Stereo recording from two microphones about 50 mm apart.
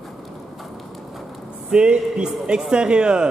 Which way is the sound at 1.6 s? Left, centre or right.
Centre.